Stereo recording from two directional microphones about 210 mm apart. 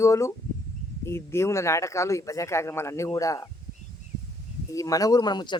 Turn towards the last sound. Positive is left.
turn(degrees=20)  # may be behind; listen again after turning